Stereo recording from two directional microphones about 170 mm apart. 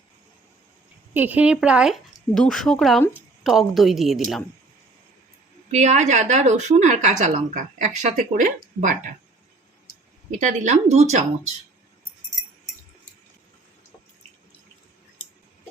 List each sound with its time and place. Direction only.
1.1 s a woman's voice: 10° right (ahead or behind)
5.7 s a woman's voice: 45° right (ahead or behind)
10.3 s a woman's voice: 45° right (ahead or behind)